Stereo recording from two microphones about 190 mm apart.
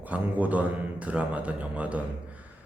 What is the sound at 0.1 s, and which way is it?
Speech, 10° right (ahead or behind).